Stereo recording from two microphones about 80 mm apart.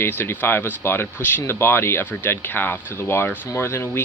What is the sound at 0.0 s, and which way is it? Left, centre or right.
Speech, left.